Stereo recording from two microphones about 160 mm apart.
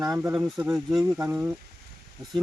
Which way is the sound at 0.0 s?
20° right (ahead or behind).